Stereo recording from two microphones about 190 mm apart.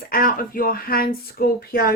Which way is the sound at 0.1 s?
45° left (ahead or behind).